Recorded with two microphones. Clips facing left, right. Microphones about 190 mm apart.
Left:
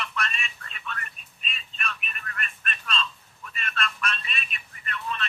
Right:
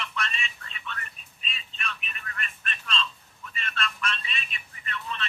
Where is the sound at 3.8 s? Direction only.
55° left (ahead or behind).